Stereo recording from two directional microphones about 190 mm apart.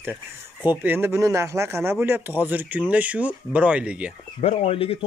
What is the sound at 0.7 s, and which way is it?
Speech, 10° right (ahead or behind).